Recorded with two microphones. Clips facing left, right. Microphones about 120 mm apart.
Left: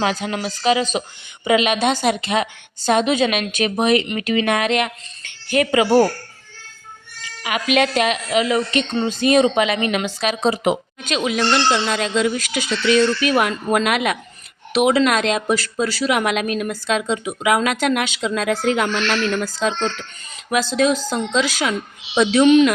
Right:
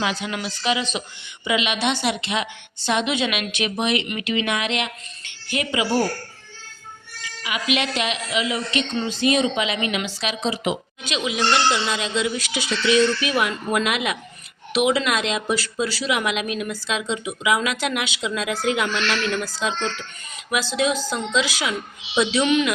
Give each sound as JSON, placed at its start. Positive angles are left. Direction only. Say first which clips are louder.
{"t": 0.0, "sound": "a woman's voice", "louder": "left 4 dB", "side_deg": 40}
{"t": 7.4, "sound": "a woman's voice", "louder": "left 6 dB", "side_deg": 50}